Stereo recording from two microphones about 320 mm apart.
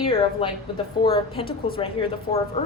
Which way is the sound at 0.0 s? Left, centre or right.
Centre.